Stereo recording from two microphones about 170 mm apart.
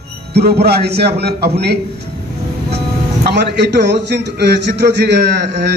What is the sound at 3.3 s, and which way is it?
A man's voice, 85° right.